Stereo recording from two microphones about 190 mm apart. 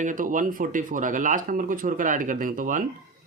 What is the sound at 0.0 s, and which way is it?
Speech, 45° right (ahead or behind).